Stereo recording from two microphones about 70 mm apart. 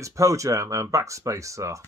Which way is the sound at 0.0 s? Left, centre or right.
Right.